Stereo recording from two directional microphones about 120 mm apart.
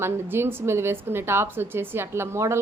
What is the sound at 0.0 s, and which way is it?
A woman's voice, 20° right (ahead or behind).